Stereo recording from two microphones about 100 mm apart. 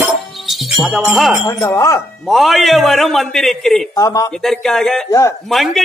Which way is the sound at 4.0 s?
35° left (ahead or behind).